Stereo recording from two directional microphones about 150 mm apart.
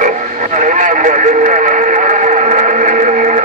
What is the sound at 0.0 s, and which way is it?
Radio, 60° right (ahead or behind).